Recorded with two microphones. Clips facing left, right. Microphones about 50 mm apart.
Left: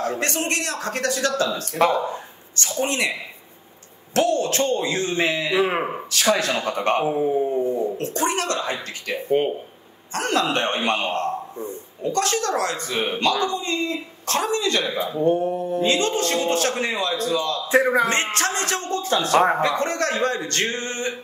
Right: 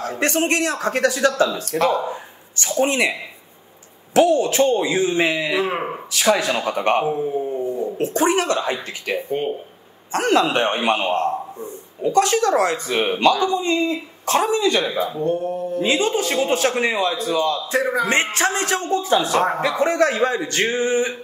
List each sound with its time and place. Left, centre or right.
0.2 s a man's voice: right
1.7 s speech: centre
2.7 s speech: centre
5.6 s speech: centre
6.1 s speech: centre
7.1 s speech: centre
7.6 s dog: left
8.0 s speech: centre
10.1 s speech: centre
15.2 s a sound: left
15.8 s speech: centre
17.3 s a man's voice: right
17.6 s a man's voice: left
18.0 s speech: centre